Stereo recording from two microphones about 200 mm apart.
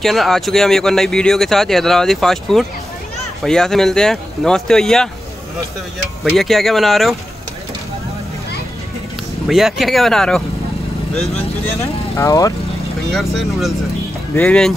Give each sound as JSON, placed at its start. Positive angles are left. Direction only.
{"t": 0.0, "sound": "speech", "side_deg": 0}
{"t": 6.2, "sound": "speech", "side_deg": 0}
{"t": 9.5, "sound": "speech", "side_deg": 0}
{"t": 11.6, "sound": "speech", "side_deg": 15}
{"t": 13.1, "sound": "speech", "side_deg": 0}